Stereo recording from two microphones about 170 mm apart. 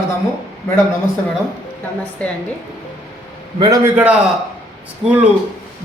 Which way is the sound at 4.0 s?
10° right (ahead or behind).